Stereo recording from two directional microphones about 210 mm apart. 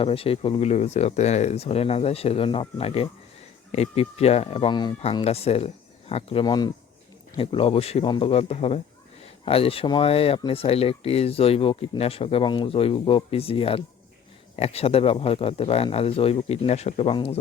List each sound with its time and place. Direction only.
0.0 s speech: 25° left (ahead or behind)